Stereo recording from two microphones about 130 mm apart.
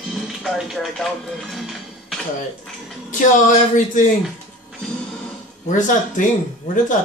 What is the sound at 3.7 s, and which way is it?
Speech, 80° left.